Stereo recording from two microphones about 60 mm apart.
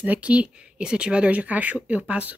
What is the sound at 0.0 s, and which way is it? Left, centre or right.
Speech, right.